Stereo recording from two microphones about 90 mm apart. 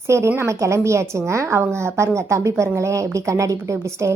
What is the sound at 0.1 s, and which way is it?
A woman's voice, 30° right (ahead or behind).